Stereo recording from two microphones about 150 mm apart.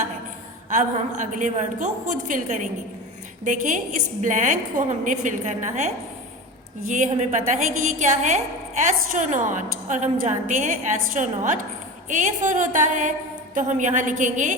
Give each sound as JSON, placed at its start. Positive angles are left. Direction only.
{"t": 0.7, "sound": "a woman's voice", "side_deg": -55}